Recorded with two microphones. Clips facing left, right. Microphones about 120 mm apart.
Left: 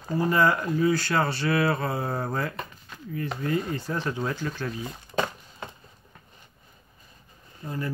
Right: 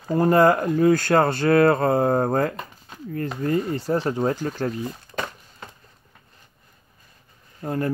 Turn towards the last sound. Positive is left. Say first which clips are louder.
# right 7 dB
turn(degrees=-55)  # may be behind; listen again after turning